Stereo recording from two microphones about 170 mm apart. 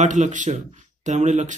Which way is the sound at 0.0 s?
45° right (ahead or behind).